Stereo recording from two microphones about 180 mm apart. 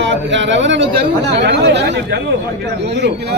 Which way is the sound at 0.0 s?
90° right.